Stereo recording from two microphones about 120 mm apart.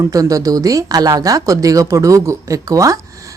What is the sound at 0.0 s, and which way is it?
Speech, 30° right (ahead or behind).